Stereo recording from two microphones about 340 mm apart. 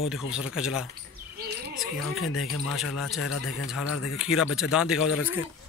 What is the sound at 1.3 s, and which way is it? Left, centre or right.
Cricket, right.